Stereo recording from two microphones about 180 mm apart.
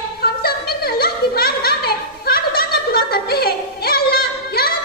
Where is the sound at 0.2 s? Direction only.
60° left (ahead or behind).